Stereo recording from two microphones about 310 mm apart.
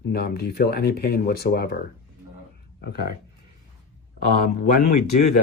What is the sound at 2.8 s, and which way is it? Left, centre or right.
Speech, left.